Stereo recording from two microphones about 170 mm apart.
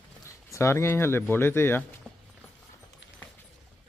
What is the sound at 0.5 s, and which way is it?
Speech, 15° left (ahead or behind).